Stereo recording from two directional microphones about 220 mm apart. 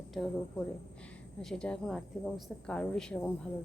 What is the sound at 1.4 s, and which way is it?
A woman's voice, 5° left (ahead or behind).